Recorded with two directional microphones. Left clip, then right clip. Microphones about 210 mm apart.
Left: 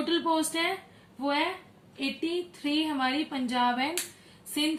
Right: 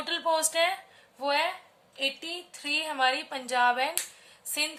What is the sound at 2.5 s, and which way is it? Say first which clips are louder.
A woman's voice: left 1 dB; 50° right (ahead or behind).